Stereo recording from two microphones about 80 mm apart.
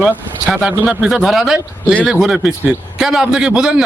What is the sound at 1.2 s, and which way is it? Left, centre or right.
A man's voice, centre.